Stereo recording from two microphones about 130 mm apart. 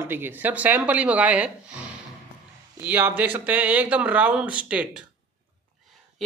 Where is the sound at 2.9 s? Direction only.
15° right (ahead or behind).